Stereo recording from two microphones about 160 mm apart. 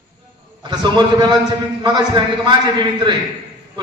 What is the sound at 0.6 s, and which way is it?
A man's voice, 30° right (ahead or behind).